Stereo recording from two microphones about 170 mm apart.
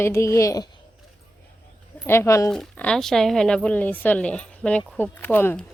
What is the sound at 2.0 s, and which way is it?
Speech, 15° left (ahead or behind).